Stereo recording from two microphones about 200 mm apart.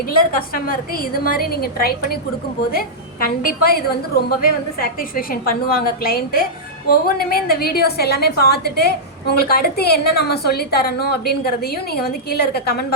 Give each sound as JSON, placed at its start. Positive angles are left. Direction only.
{"t": 0.2, "sound": "a woman's voice", "side_deg": 45}
{"t": 3.2, "sound": "a woman's voice", "side_deg": 50}